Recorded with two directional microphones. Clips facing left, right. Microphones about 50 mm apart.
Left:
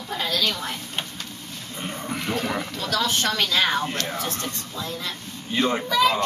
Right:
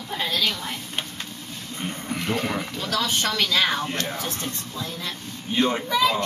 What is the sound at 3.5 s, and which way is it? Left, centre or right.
Speech, centre.